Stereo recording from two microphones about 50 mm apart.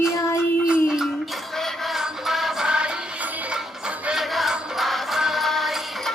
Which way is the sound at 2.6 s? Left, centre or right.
Centre.